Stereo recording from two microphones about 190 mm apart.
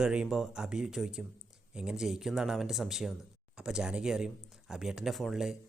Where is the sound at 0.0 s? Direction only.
5° right (ahead or behind).